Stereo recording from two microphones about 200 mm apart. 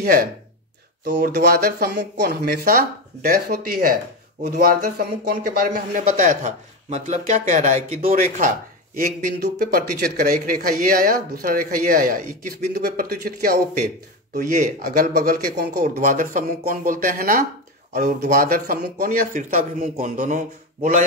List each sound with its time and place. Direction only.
0.0 s speech: 45° right (ahead or behind)
1.0 s speech: 55° right (ahead or behind)
14.6 s speech: 45° right (ahead or behind)
15.8 s speech: 40° right (ahead or behind)